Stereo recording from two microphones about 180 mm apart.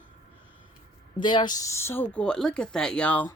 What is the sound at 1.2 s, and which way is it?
Speech, 25° left (ahead or behind).